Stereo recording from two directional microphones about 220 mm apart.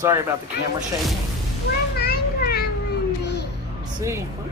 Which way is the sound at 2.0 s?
45° left (ahead or behind).